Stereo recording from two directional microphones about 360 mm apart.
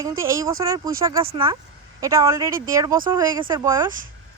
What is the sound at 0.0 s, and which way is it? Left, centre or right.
Speech, centre.